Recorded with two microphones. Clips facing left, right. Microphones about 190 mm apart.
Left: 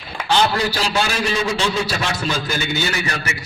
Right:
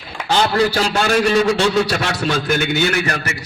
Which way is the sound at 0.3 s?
50° right (ahead or behind).